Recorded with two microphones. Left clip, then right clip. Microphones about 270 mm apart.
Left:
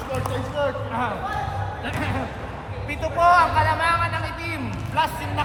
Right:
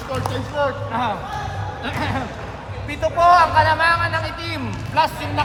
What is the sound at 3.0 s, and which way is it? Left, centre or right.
A man's voice, right.